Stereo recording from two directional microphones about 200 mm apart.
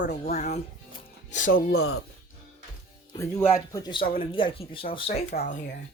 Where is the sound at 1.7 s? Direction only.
90° left.